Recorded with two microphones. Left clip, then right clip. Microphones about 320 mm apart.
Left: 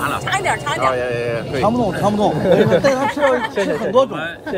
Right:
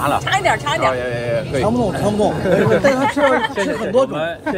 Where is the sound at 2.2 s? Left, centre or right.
Left.